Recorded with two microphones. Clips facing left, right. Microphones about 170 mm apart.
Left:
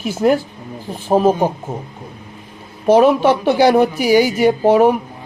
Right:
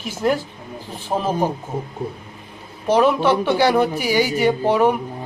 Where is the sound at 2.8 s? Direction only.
10° left (ahead or behind).